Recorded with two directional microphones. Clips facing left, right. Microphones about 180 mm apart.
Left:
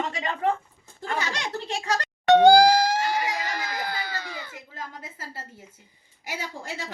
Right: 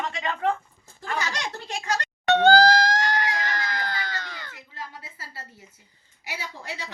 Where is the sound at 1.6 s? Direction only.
30° left (ahead or behind).